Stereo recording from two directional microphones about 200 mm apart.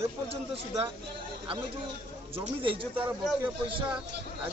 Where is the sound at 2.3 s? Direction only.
25° right (ahead or behind).